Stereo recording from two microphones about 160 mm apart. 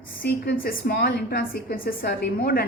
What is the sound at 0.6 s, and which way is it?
A woman's voice, 75° left (ahead or behind).